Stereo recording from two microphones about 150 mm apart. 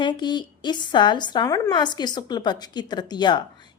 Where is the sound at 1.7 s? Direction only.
30° left (ahead or behind).